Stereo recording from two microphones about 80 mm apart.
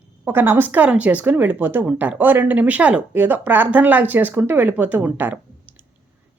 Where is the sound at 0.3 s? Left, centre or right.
Right.